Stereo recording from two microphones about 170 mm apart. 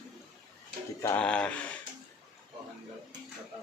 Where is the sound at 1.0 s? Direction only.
10° left (ahead or behind).